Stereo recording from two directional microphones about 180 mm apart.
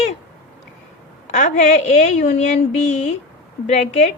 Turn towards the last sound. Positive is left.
turn(degrees=35)  # may be behind; listen again after turning